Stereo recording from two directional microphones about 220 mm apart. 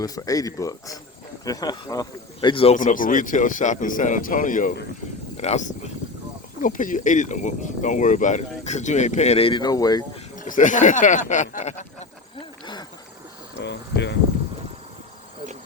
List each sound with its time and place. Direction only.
0.0 s speech: 15° left (ahead or behind)
2.7 s speech: 35° left (ahead or behind); by 10.0 s 15° left (ahead or behind)
10.3 s speech: 35° left (ahead or behind)
13.6 s speech: 50° left (ahead or behind)